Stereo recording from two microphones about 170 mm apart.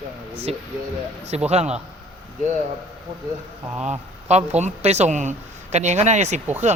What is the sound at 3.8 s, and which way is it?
Speech, 40° right (ahead or behind).